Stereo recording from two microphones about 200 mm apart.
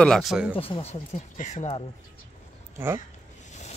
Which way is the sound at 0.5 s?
25° left (ahead or behind).